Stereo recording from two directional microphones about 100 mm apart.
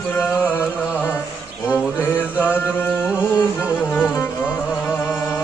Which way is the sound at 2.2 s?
15° right (ahead or behind).